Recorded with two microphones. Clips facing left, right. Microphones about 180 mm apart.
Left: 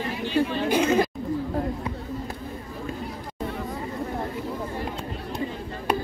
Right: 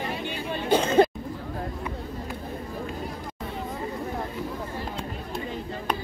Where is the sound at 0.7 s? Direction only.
30° right (ahead or behind).